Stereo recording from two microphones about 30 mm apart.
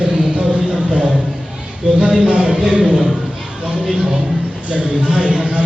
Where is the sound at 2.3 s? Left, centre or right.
Right.